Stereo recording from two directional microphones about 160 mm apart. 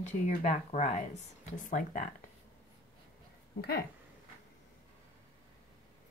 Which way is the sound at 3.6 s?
80° left.